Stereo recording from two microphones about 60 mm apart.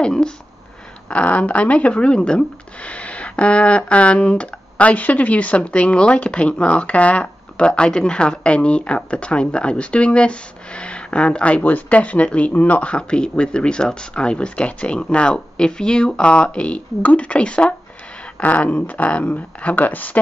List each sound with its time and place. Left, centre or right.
0.0 s speech: centre; by 20.2 s left